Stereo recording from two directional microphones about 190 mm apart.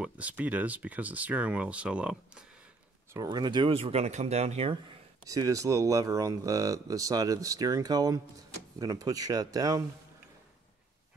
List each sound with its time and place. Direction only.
0.0 s speech: 5° right (ahead or behind)
3.1 s speech: 20° right (ahead or behind)
5.2 s speech: 15° right (ahead or behind)